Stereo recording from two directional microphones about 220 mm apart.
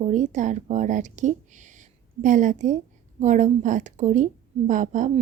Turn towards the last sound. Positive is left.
turn(degrees=-35)  # may be behind; listen again after turning